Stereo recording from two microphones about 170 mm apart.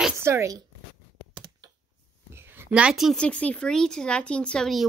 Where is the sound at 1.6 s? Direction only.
25° right (ahead or behind).